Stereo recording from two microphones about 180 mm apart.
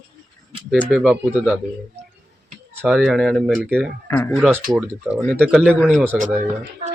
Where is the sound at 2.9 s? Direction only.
Centre (ahead or behind).